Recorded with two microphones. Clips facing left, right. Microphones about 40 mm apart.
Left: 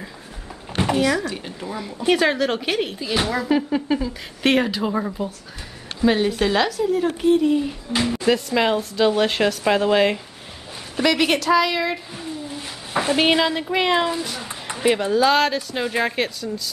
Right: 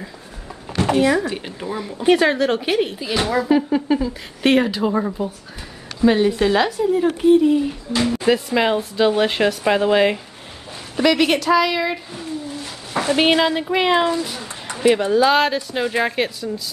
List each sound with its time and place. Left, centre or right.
1.0 s speech: right
1.7 s speech: centre
12.5 s a sound: centre
13.1 s speech: centre